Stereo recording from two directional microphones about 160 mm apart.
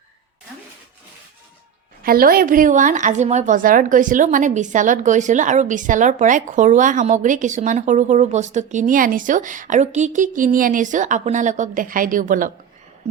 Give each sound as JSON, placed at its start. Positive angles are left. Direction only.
{"t": 2.0, "sound": "a woman's voice", "side_deg": -65}